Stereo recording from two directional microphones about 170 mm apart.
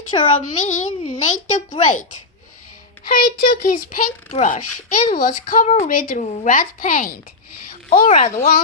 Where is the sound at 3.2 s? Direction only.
65° left (ahead or behind).